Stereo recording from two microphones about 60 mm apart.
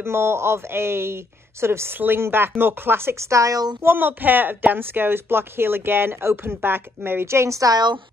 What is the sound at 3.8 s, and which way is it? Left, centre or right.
A woman's voice, right.